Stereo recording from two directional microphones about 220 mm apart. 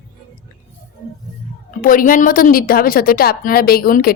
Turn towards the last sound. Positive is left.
turn(degrees=45)  # may be behind; listen again after turning